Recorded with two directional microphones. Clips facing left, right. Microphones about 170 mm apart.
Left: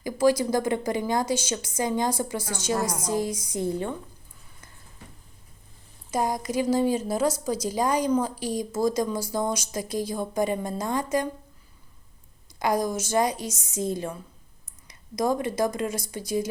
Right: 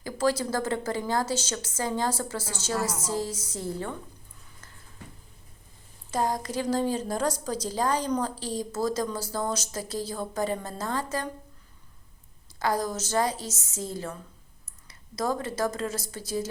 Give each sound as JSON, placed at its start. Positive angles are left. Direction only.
{"t": 0.0, "sound": "a woman's voice", "side_deg": 10}
{"t": 6.1, "sound": "a woman's voice", "side_deg": 10}
{"t": 12.5, "sound": "a woman's voice", "side_deg": 15}